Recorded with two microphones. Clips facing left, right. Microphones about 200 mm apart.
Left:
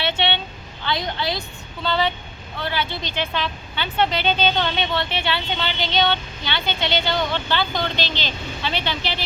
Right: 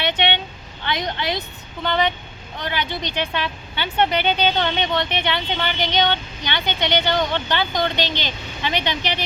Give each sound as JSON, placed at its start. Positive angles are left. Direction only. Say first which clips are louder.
{"t": 0.0, "sound": "vehicle", "louder": "right 1 dB", "side_deg": -15}
{"t": 0.9, "sound": "speech", "louder": "even", "side_deg": -20}